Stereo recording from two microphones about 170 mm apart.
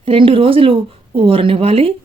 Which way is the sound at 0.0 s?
30° right (ahead or behind).